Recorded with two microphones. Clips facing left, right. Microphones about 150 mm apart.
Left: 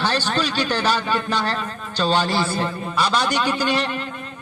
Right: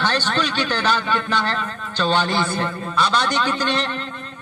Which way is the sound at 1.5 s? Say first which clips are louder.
Even; 35° left (ahead or behind).